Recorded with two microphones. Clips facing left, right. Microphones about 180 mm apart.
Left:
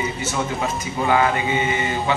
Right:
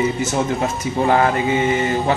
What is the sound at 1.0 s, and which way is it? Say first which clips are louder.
Speech: right 3 dB; 40° right (ahead or behind).